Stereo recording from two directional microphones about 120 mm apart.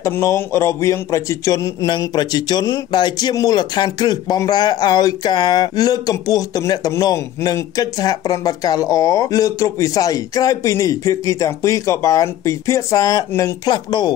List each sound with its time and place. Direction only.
0.0 s speech: 20° left (ahead or behind)
1.9 s speech: 35° left (ahead or behind)